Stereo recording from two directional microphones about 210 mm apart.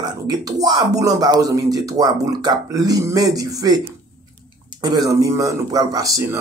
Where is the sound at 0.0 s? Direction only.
15° right (ahead or behind).